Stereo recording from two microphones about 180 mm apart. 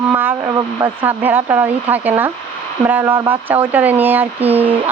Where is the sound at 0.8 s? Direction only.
10° right (ahead or behind).